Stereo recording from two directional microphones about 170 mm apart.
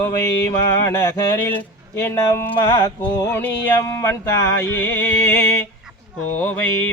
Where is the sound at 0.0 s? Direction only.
15° left (ahead or behind).